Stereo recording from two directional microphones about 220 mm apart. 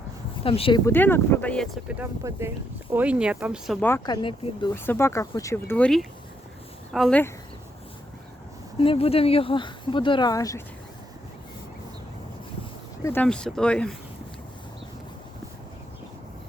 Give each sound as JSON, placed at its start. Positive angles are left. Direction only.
{"t": 0.4, "sound": "speech", "side_deg": 25}
{"t": 0.9, "sound": "speech", "side_deg": 10}
{"t": 3.8, "sound": "speech", "side_deg": 10}
{"t": 8.8, "sound": "speech", "side_deg": 25}
{"t": 13.1, "sound": "speech", "side_deg": 5}